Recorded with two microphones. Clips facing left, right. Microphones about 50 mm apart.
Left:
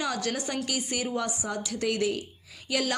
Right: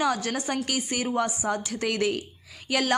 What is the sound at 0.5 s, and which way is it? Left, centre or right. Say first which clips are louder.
Speech: right 3 dB; right.